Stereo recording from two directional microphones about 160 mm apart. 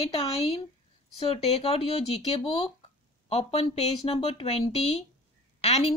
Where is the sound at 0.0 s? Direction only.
40° left (ahead or behind).